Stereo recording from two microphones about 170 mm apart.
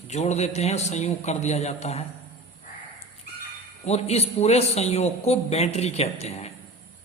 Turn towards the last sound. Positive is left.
turn(degrees=40)  # may be behind; listen again after turning